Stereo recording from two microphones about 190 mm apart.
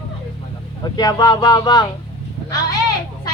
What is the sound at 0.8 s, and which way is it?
Speech, 20° left (ahead or behind).